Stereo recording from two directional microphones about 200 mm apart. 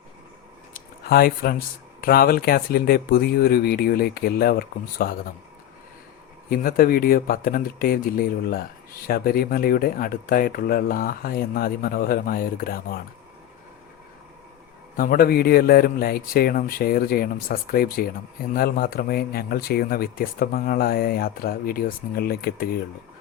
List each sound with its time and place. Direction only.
0.7 s speech: 50° left (ahead or behind)
6.5 s speech: 45° left (ahead or behind)
14.9 s speech: 45° left (ahead or behind)